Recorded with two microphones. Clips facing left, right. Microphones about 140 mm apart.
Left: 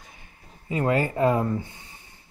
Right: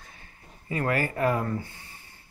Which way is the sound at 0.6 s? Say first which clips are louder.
Left 4 dB; 20° left (ahead or behind).